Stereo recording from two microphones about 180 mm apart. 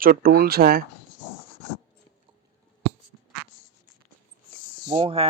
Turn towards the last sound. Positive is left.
turn(degrees=-30)  # may be behind; listen again after turning